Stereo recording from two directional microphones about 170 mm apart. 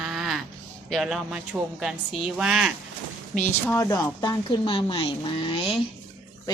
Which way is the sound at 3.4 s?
15° left (ahead or behind).